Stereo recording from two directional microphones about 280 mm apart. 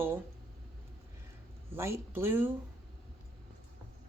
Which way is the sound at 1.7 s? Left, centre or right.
Centre.